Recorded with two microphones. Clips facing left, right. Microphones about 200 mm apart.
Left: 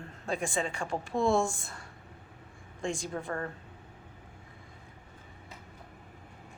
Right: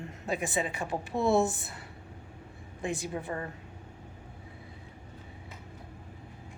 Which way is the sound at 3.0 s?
10° right (ahead or behind).